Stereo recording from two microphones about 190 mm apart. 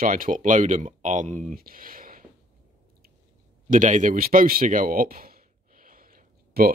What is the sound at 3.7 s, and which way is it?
Speech, 40° right (ahead or behind).